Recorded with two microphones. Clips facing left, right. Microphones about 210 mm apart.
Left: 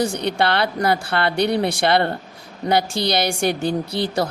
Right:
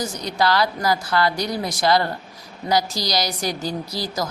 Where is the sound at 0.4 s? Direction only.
60° left (ahead or behind).